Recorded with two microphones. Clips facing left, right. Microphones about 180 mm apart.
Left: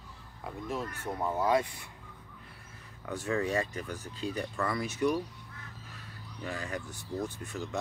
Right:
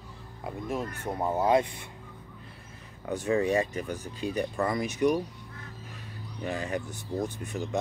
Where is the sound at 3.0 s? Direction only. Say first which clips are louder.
Right 5 dB; 20° right (ahead or behind).